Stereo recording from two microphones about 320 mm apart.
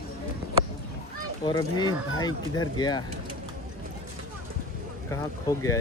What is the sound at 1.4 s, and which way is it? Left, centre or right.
Speech, centre.